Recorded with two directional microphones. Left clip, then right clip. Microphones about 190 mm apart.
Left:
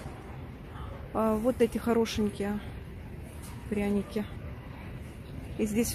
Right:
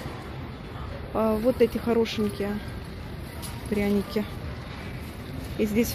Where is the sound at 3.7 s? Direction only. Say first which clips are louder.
Right 5 dB; 10° left (ahead or behind).